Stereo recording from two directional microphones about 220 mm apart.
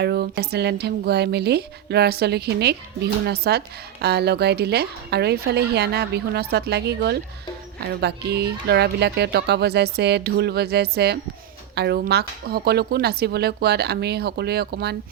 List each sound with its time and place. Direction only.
0.0 s speech: 50° right (ahead or behind)